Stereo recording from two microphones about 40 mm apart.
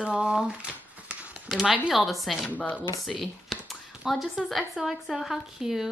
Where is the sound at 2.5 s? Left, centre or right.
Left.